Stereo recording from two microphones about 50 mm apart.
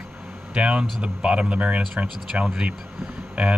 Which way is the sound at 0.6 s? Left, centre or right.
Right.